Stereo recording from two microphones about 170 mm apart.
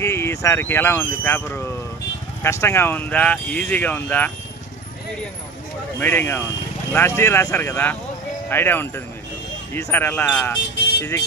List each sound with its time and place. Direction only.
0.0 s speech: 15° left (ahead or behind)
5.9 s speech: 10° left (ahead or behind)